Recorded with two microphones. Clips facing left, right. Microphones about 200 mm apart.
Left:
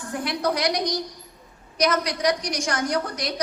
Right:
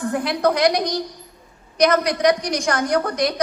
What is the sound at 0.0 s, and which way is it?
A woman's voice, 60° right (ahead or behind).